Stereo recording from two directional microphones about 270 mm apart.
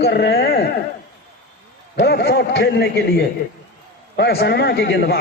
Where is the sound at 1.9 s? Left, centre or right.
Left.